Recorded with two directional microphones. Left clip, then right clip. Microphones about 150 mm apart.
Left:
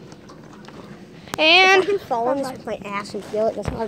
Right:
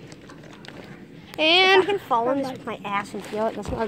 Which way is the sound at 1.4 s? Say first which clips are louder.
Left 4 dB; 20° right (ahead or behind).